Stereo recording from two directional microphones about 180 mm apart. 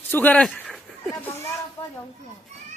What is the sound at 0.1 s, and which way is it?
Speech, 10° left (ahead or behind).